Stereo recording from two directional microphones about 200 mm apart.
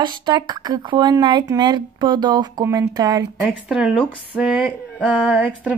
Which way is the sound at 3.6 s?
5° right (ahead or behind).